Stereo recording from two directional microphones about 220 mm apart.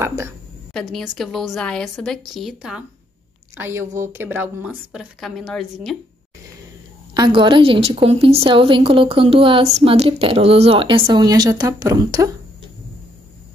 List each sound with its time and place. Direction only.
0.0 s a woman's voice: 10° right (ahead or behind)
0.7 s a woman's voice: centre (ahead or behind)
7.2 s a woman's voice: 20° right (ahead or behind)